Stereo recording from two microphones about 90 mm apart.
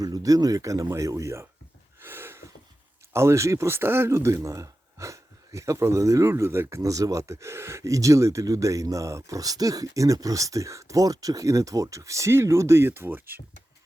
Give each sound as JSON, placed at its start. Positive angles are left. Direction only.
{"t": 0.0, "sound": "speech", "side_deg": -40}
{"t": 2.0, "sound": "a sound", "side_deg": -25}
{"t": 3.1, "sound": "speech", "side_deg": -30}